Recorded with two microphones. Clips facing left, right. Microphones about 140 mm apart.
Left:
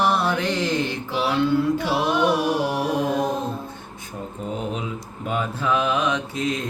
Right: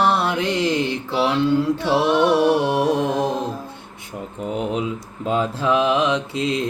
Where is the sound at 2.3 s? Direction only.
30° right (ahead or behind).